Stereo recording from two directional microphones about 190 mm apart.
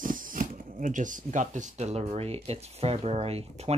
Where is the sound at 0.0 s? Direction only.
45° right (ahead or behind).